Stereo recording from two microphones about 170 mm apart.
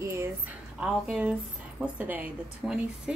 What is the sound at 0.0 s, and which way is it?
Speech, 15° right (ahead or behind).